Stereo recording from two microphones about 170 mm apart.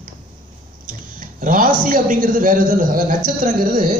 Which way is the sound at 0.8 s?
50° right (ahead or behind).